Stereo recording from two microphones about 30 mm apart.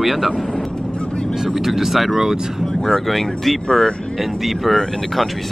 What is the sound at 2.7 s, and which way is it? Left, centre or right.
Speech, centre.